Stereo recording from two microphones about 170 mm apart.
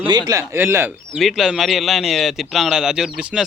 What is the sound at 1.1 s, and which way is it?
Speech, centre (ahead or behind).